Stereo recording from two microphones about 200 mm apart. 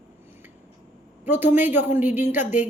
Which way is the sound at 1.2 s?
10° right (ahead or behind).